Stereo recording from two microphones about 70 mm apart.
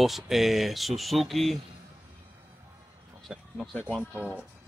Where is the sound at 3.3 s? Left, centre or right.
Centre.